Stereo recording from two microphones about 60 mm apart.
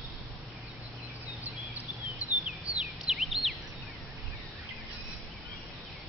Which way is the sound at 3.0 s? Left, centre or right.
Centre.